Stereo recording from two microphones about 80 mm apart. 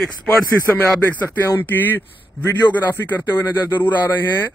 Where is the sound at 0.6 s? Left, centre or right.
Left.